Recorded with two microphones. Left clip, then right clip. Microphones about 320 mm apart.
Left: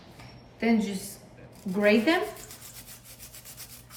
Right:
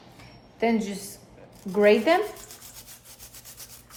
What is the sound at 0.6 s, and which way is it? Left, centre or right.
A woman's voice, centre.